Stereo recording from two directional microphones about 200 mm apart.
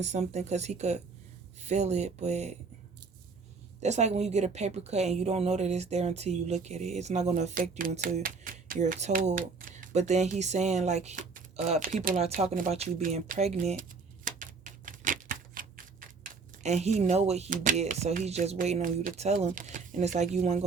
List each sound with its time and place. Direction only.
0.0 s a woman's voice: 35° right (ahead or behind)
3.8 s a woman's voice: 35° right (ahead or behind)
14.3 s typewriter: 40° right (ahead or behind)